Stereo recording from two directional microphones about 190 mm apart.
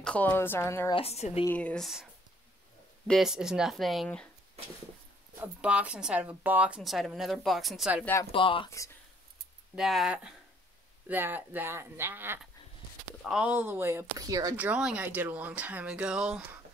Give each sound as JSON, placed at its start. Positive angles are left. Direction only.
{"t": 0.0, "sound": "a woman's voice", "side_deg": 10}
{"t": 0.9, "sound": "speech", "side_deg": 35}
{"t": 1.4, "sound": "a woman's voice", "side_deg": 10}
{"t": 3.1, "sound": "speech", "side_deg": 0}
{"t": 5.4, "sound": "speech", "side_deg": -5}
{"t": 8.0, "sound": "a woman's voice", "side_deg": 10}
{"t": 8.3, "sound": "speech", "side_deg": 25}
{"t": 8.6, "sound": "a woman's voice", "side_deg": 15}
{"t": 9.8, "sound": "speech", "side_deg": 0}